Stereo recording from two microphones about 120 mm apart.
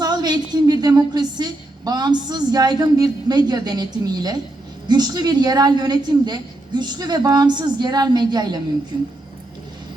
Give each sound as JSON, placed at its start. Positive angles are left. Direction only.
{"t": 0.0, "sound": "a woman's voice", "side_deg": -35}